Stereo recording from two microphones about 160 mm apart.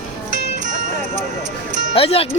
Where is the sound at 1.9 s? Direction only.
35° left (ahead or behind).